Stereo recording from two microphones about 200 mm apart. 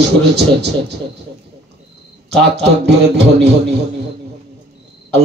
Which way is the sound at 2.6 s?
55° right (ahead or behind).